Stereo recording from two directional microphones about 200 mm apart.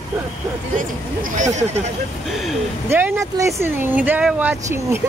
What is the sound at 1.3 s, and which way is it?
Speech, 35° right (ahead or behind).